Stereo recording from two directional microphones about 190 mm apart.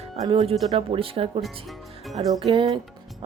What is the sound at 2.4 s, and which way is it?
Speech, 25° right (ahead or behind).